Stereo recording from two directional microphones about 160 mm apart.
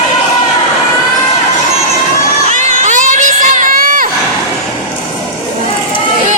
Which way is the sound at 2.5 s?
50° right (ahead or behind).